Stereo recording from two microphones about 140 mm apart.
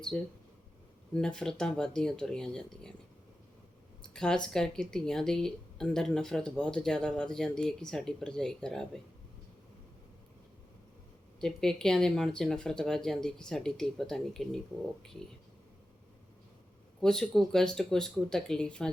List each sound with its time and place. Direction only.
1.1 s a woman's voice: 5° left (ahead or behind)
4.0 s a sound: 5° left (ahead or behind)
4.4 s a woman's voice: 5° left (ahead or behind)
11.3 s a woman's voice: 5° left (ahead or behind)
17.0 s a woman's voice: 5° left (ahead or behind)